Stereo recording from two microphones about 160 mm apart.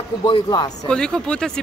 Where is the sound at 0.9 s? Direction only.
5° left (ahead or behind).